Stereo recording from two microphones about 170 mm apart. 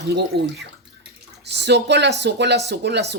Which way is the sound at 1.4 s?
85° right.